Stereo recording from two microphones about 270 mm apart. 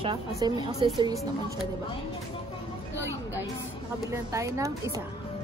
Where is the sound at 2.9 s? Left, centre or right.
Centre.